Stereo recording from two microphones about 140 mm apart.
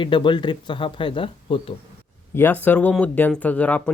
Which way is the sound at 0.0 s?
35° left (ahead or behind).